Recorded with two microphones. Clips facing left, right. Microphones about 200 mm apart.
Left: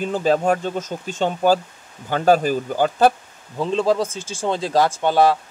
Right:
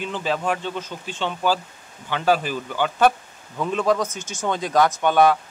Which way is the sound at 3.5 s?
30° left (ahead or behind).